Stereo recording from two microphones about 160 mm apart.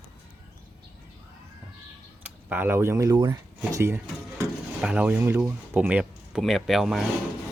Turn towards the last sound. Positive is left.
turn(degrees=0)  # may be behind; listen again after turning